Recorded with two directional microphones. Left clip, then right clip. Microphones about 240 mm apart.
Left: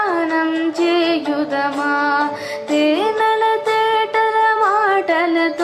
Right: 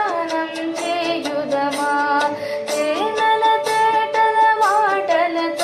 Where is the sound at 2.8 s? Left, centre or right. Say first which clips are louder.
Left 1 dB; left.